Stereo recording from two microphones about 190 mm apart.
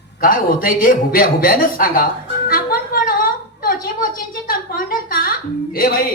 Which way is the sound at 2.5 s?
50° left (ahead or behind).